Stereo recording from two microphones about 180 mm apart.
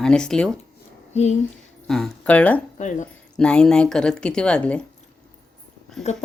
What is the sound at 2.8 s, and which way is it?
Speech, 45° left (ahead or behind).